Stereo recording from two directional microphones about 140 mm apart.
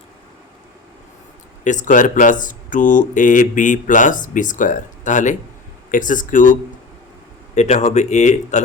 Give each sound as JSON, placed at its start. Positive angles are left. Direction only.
{"t": 1.6, "sound": "speech", "side_deg": 65}
{"t": 7.5, "sound": "speech", "side_deg": 55}